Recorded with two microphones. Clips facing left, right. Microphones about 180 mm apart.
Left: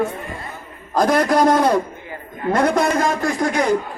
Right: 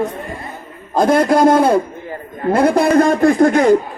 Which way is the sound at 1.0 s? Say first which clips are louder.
Right 4 dB; 25° right (ahead or behind).